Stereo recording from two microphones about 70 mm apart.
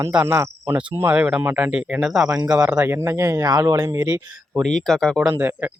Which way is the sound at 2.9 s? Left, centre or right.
Right.